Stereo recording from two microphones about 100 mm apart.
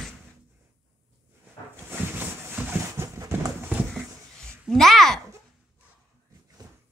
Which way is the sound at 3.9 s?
5° left (ahead or behind).